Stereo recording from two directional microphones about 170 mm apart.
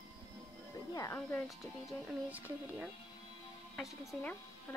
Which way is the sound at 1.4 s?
Centre (ahead or behind).